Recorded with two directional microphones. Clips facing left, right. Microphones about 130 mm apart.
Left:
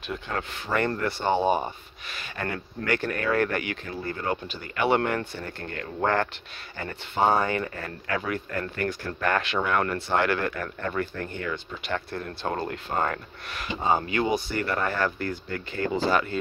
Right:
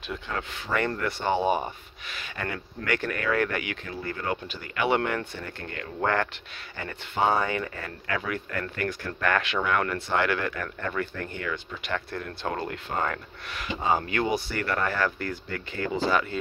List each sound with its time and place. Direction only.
0.1 s speech: 45° left (ahead or behind)
7.2 s speech: 40° left (ahead or behind)
14.0 s speech: 20° left (ahead or behind)
16.1 s speech: 45° left (ahead or behind)